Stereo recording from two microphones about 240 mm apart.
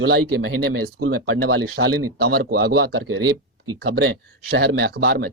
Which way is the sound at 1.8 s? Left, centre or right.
Right.